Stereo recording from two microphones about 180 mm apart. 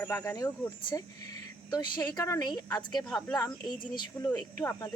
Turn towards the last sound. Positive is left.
turn(degrees=15)  # may be behind; listen again after turning